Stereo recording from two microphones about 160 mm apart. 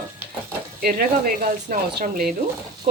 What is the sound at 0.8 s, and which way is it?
Speech, 65° right (ahead or behind).